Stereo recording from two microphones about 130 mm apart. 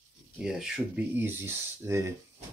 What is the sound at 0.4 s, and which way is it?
Speech, 5° right (ahead or behind).